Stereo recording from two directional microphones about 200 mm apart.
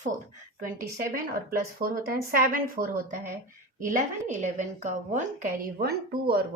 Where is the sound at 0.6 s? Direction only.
45° right (ahead or behind).